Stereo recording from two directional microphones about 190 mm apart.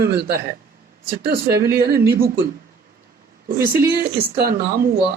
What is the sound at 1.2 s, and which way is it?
Speech, 55° right (ahead or behind).